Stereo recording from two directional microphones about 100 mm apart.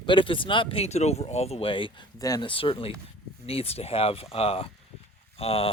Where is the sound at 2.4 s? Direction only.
65° left (ahead or behind).